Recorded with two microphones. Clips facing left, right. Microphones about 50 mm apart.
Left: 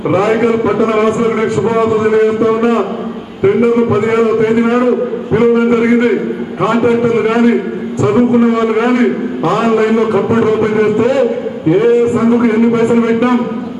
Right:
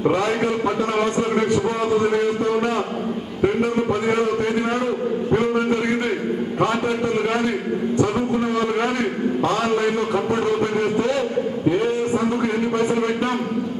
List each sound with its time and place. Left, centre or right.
0.1 s a man's voice: left